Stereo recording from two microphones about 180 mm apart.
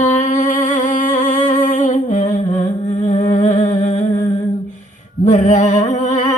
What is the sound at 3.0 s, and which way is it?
Humming, 40° left (ahead or behind).